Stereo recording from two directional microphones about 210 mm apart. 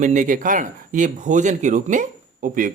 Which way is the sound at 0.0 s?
35° right (ahead or behind).